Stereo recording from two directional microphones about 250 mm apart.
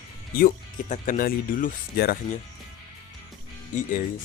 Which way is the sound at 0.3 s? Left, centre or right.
Left.